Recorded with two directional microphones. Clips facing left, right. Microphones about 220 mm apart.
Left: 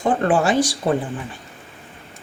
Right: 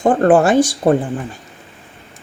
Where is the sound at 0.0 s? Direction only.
50° right (ahead or behind).